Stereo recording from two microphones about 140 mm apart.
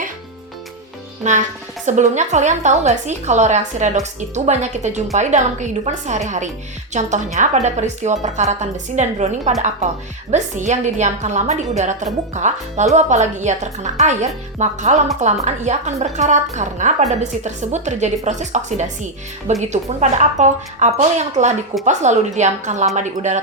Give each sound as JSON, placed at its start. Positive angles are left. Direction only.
{"t": 1.2, "sound": "a woman's voice", "side_deg": -60}